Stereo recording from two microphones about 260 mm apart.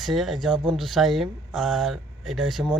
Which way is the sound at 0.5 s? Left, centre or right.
Centre.